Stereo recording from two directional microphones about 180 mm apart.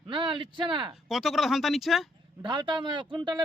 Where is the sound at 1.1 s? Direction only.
Centre (ahead or behind).